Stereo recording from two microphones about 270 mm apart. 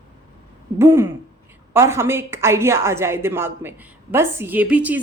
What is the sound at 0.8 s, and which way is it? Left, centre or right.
A woman's voice, centre.